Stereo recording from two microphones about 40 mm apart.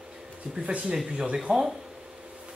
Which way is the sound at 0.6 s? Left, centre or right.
Right.